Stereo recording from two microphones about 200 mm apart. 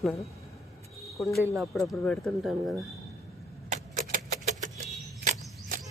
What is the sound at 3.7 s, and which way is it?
Keys jangling, 40° right (ahead or behind).